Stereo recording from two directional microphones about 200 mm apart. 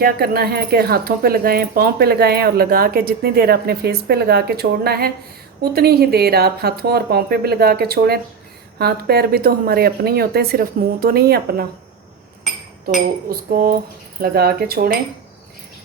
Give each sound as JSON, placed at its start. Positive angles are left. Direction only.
{"t": 0.0, "sound": "speech", "side_deg": -50}
{"t": 13.2, "sound": "speech", "side_deg": -45}